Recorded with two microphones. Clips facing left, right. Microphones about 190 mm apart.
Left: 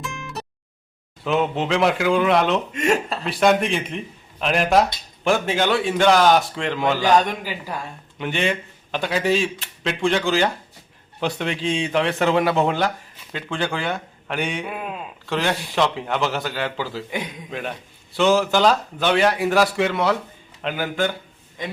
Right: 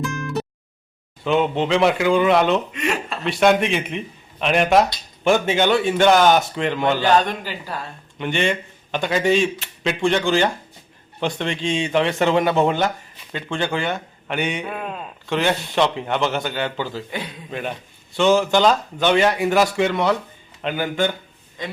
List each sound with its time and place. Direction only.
0.0 s a sound: centre (ahead or behind)
1.2 s speech: centre (ahead or behind)
2.7 s speech: 45° left (ahead or behind)
3.2 s speech: centre (ahead or behind)
8.2 s speech: centre (ahead or behind)
17.1 s a man's voice: 15° left (ahead or behind)
17.5 s speech: centre (ahead or behind)